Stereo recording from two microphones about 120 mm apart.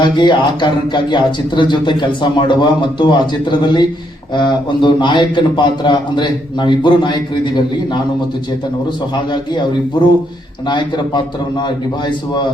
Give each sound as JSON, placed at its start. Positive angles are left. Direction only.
{"t": 0.0, "sound": "a man's voice", "side_deg": 40}
{"t": 10.7, "sound": "a man's voice", "side_deg": 40}